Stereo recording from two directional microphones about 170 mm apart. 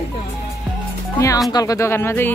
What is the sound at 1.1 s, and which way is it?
Speech, 20° left (ahead or behind).